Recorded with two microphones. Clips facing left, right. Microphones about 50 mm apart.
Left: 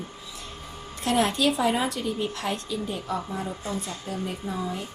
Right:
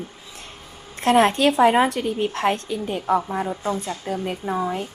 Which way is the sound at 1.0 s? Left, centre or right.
Right.